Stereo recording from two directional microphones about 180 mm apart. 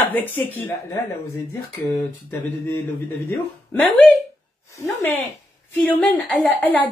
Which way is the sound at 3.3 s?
10° left (ahead or behind).